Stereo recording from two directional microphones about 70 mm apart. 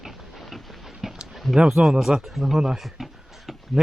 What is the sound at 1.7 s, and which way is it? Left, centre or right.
Speech, centre.